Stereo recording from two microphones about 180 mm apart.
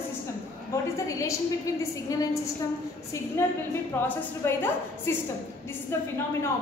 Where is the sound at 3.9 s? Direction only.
10° left (ahead or behind).